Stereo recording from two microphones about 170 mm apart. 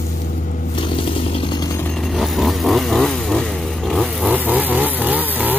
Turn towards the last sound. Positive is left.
turn(degrees=-10)  # may be behind; listen again after turning